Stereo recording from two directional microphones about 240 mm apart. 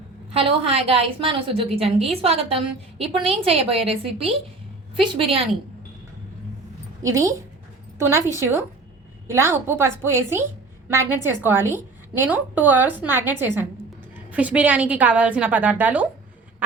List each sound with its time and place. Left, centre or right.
0.3 s a woman's voice: right
7.0 s a woman's voice: centre